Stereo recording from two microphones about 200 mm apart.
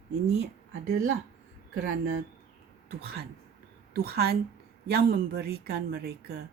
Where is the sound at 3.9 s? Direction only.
55° right (ahead or behind).